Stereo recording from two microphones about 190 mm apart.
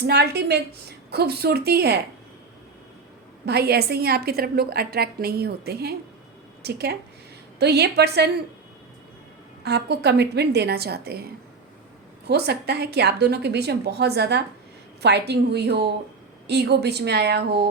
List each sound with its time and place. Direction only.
0.1 s a woman's voice: 60° right (ahead or behind)
3.4 s a woman's voice: 55° right (ahead or behind)
9.6 s a woman's voice: 60° right (ahead or behind)
12.3 s a woman's voice: 60° right (ahead or behind)